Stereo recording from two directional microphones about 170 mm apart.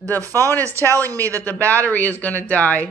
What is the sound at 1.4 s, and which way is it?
Speech, 10° left (ahead or behind).